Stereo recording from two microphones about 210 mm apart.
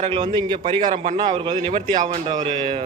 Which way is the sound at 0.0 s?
25° right (ahead or behind).